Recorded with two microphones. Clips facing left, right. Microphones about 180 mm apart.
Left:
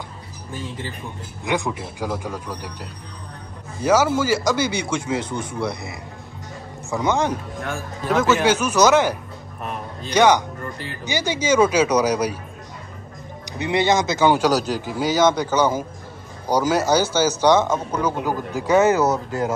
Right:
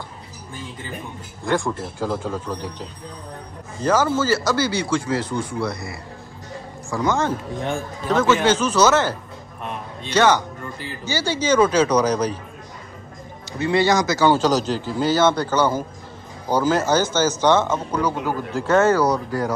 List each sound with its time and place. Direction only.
1.4 s speech: 20° left (ahead or behind)
10.1 s speech: 15° left (ahead or behind)
13.5 s speech: 20° left (ahead or behind)
18.8 s speech: 20° left (ahead or behind)